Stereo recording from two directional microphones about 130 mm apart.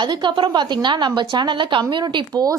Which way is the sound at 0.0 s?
35° right (ahead or behind).